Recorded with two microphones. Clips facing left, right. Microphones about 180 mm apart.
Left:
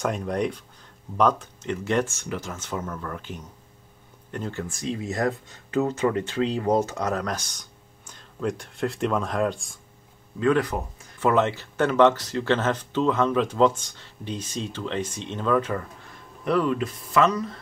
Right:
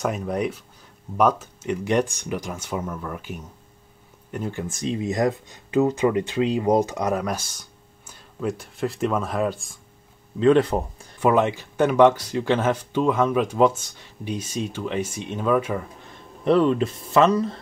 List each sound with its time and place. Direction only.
0.0 s speech: 5° right (ahead or behind)
10.4 s speech: 25° right (ahead or behind)
11.1 s speech: 15° right (ahead or behind)
16.4 s speech: 25° right (ahead or behind)